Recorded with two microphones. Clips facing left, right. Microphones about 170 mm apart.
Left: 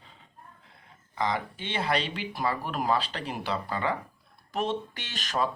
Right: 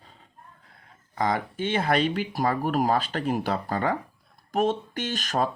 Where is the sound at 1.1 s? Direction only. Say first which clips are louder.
Right 4 dB; 45° right (ahead or behind).